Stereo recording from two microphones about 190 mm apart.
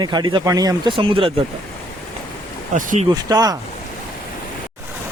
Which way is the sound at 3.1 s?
20° right (ahead or behind).